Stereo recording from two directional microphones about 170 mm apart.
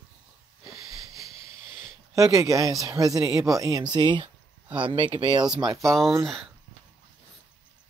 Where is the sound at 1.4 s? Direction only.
20° right (ahead or behind).